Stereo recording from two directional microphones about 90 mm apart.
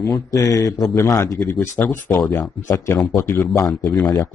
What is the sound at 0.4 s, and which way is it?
Speech, 40° left (ahead or behind).